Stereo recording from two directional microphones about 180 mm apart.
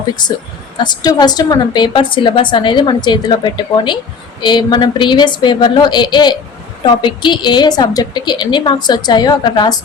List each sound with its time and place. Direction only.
0.2 s a woman's voice: 25° left (ahead or behind)